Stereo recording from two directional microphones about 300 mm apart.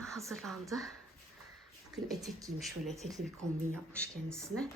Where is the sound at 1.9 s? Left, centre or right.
Centre.